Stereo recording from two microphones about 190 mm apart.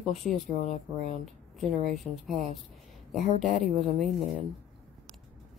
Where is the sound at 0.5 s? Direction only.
40° left (ahead or behind).